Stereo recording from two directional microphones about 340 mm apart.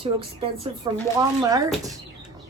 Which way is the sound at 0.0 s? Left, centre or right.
Centre.